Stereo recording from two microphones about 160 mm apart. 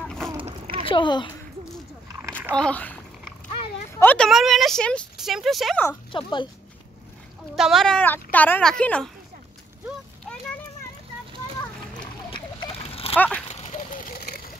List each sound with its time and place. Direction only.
0.4 s a sound: 35° right (ahead or behind)
0.8 s speech: 30° left (ahead or behind)
2.5 s speech: 5° left (ahead or behind)
4.3 s speech: centre (ahead or behind)
6.1 s speech: 30° left (ahead or behind)
7.5 s speech: centre (ahead or behind)
12.3 s a sound: 35° left (ahead or behind)
13.1 s speech: 10° left (ahead or behind)
13.5 s a sound: 45° left (ahead or behind); by 14.4 s 65° left (ahead or behind)